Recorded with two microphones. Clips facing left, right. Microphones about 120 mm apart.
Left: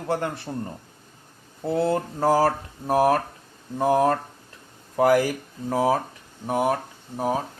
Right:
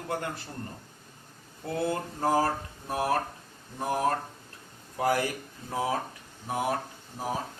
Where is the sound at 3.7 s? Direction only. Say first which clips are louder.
Left 8 dB; 90° left.